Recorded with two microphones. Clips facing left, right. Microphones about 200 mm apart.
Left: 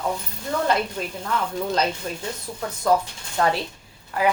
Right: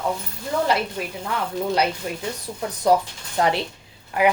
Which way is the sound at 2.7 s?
20° right (ahead or behind).